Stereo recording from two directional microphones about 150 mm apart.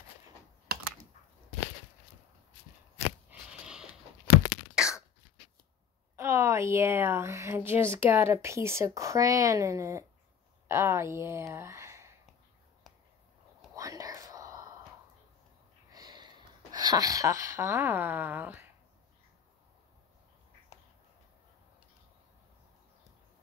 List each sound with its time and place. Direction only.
3.3 s a sound: 5° right (ahead or behind)
4.8 s cough: 5° right (ahead or behind)
6.1 s a woman's voice: 20° right (ahead or behind)
13.7 s whispering: 25° right (ahead or behind)
15.9 s speech: 30° right (ahead or behind)